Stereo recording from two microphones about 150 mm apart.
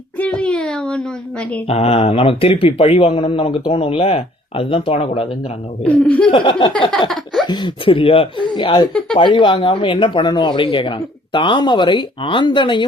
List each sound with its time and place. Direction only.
0.2 s a sound: 5° left (ahead or behind)
1.6 s speech: 40° left (ahead or behind)
5.8 s speech: 10° left (ahead or behind)
6.3 s speech: 35° left (ahead or behind)
8.9 s speech: 5° left (ahead or behind)
9.1 s speech: 30° left (ahead or behind)